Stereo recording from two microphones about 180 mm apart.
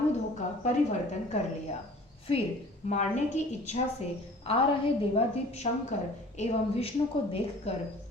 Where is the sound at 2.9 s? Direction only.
40° left (ahead or behind).